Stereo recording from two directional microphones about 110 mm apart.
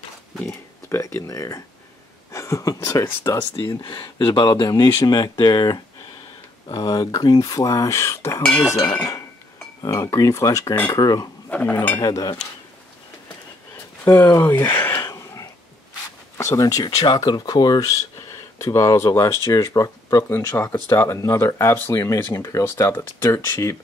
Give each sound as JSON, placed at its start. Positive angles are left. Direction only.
{"t": 0.5, "sound": "a sound", "side_deg": 25}
{"t": 2.3, "sound": "speech", "side_deg": 30}
{"t": 3.8, "sound": "speech", "side_deg": 50}
{"t": 8.4, "sound": "speech", "side_deg": 10}
{"t": 9.8, "sound": "speech", "side_deg": 30}
{"t": 11.5, "sound": "speech", "side_deg": 15}
{"t": 12.0, "sound": "speech", "side_deg": 35}
{"t": 14.0, "sound": "speech", "side_deg": 25}
{"t": 15.0, "sound": "a sound", "side_deg": 30}
{"t": 16.3, "sound": "speech", "side_deg": 30}